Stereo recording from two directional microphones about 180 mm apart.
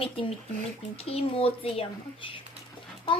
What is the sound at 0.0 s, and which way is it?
A woman's voice, 30° left (ahead or behind).